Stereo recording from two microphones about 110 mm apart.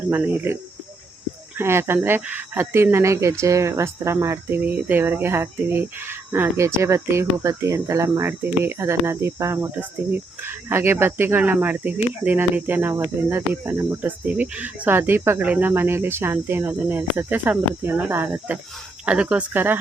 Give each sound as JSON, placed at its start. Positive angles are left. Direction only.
{"t": 0.1, "sound": "speech", "side_deg": -20}